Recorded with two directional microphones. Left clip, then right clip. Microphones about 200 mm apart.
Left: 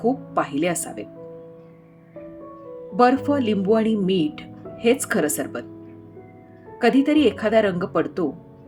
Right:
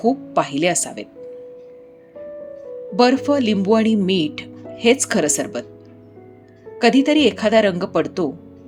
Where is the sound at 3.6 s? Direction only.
15° right (ahead or behind).